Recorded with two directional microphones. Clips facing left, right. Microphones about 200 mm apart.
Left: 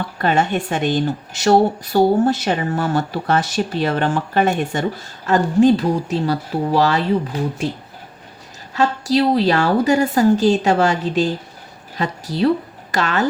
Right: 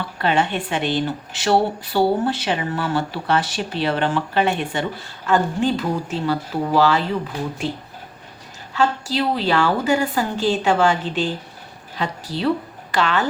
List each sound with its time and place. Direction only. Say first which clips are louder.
0.2 s a woman's voice: left 2 dB; 45° left (ahead or behind)
8.7 s a woman's voice: left 4 dB; 40° left (ahead or behind)